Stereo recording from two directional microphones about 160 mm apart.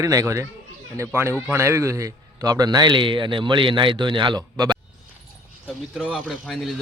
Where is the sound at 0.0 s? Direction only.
20° right (ahead or behind).